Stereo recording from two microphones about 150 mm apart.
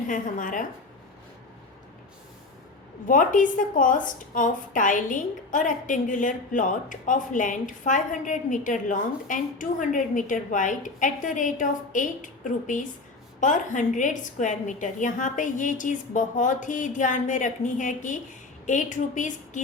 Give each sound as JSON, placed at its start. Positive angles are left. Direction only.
{"t": 0.1, "sound": "a woman's voice", "side_deg": 60}
{"t": 3.1, "sound": "a woman's voice", "side_deg": 60}